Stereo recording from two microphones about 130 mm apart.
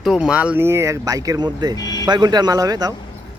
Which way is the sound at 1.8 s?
30° left (ahead or behind).